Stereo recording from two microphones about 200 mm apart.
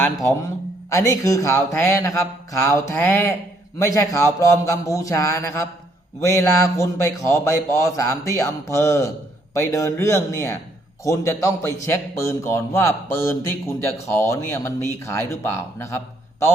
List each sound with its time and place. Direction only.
0.9 s a man's voice: 15° left (ahead or behind)